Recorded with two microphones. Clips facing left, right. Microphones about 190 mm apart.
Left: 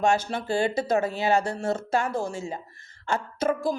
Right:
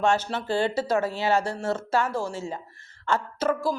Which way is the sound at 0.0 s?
10° left (ahead or behind).